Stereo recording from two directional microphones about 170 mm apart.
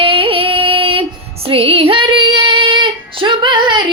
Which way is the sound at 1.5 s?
35° right (ahead or behind).